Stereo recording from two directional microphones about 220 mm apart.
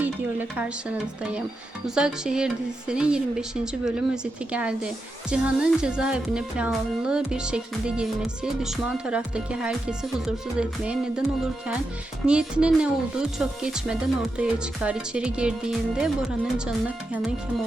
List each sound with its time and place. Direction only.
0.0 s speech: 5° right (ahead or behind)
12.2 s speech: 5° right (ahead or behind)